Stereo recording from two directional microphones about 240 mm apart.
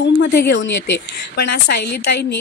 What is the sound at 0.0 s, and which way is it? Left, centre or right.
Speech, left.